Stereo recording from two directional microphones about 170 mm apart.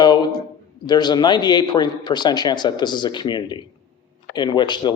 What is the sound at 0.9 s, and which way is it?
Speech, 25° left (ahead or behind).